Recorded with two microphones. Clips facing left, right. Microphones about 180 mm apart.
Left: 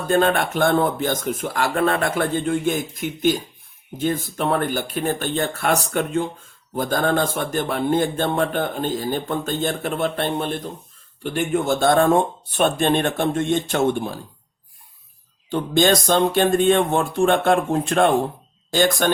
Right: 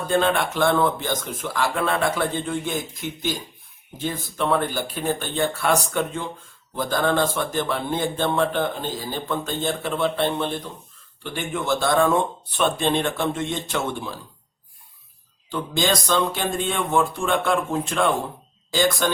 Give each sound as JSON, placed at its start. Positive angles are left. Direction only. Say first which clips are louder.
{"t": 0.1, "sound": "a man's voice", "louder": "left 3 dB", "side_deg": 50}
{"t": 15.4, "sound": "a man's voice", "louder": "left 6 dB", "side_deg": 60}